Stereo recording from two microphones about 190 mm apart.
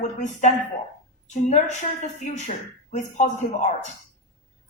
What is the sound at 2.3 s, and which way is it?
Speech, 40° left (ahead or behind).